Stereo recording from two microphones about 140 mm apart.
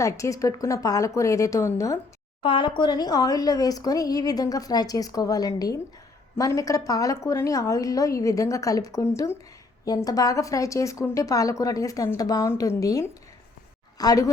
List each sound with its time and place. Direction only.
0.0 s speech: 20° left (ahead or behind)
2.4 s speech: 35° left (ahead or behind)